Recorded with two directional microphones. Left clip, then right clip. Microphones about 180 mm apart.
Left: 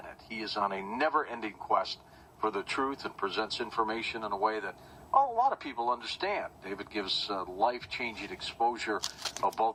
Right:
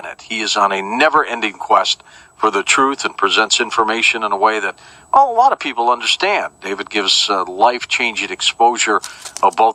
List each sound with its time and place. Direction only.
0.0 s speech: 40° right (ahead or behind)